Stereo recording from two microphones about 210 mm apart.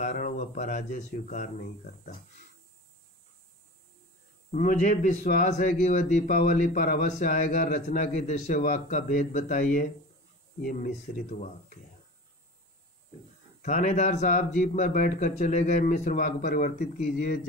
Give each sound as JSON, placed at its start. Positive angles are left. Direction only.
{"t": 0.0, "sound": "speech", "side_deg": 35}
{"t": 4.5, "sound": "a man's voice", "side_deg": 40}
{"t": 13.6, "sound": "a man's voice", "side_deg": 40}